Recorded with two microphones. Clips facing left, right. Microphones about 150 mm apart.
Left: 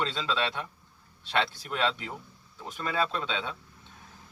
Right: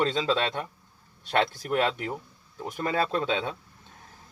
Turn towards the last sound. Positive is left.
turn(degrees=-45)  # may be behind; listen again after turning